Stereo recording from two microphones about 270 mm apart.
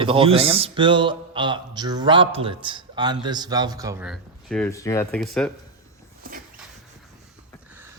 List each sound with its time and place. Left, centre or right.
0.0 s speech: centre